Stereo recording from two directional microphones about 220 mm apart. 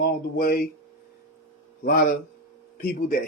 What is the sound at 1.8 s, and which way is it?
Speech, 45° left (ahead or behind).